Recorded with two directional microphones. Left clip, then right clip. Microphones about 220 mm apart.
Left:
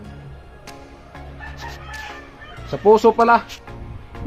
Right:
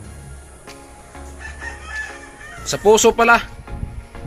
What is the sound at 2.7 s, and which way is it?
Speech, 10° right (ahead or behind).